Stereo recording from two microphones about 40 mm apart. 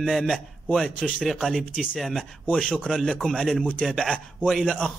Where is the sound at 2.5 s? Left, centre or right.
Left.